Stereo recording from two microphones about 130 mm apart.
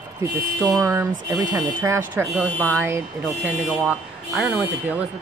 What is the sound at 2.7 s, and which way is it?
Speech, 15° right (ahead or behind).